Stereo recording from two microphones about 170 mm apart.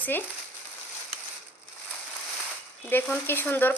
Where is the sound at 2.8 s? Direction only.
10° left (ahead or behind).